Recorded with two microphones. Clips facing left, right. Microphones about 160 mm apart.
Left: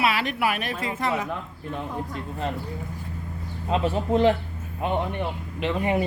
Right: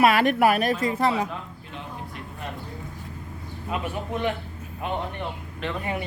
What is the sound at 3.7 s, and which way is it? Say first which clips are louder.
Speech: left 7 dB; 30° left (ahead or behind).